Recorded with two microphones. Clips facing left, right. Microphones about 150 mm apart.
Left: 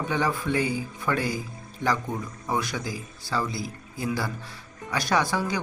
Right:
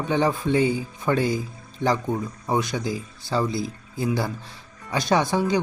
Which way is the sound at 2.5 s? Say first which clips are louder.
Right 4 dB; 20° right (ahead or behind).